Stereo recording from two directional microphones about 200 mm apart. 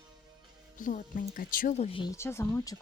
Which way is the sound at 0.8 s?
40° left (ahead or behind).